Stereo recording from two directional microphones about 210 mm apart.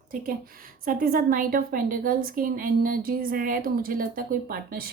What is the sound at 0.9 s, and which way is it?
A woman's voice, 40° right (ahead or behind).